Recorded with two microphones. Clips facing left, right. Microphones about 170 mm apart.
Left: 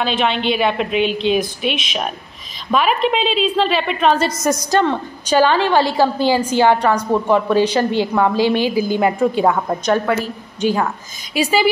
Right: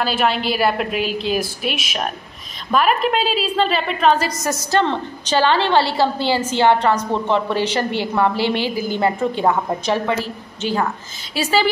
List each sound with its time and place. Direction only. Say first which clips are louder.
0.0 s a woman's voice: left 1 dB; 5° right (ahead or behind)
4.4 s a woman's voice: left 3 dB; 15° left (ahead or behind)